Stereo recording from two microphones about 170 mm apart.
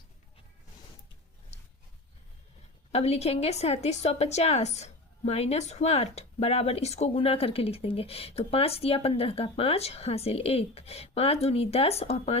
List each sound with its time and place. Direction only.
2.9 s a woman's voice: 40° left (ahead or behind)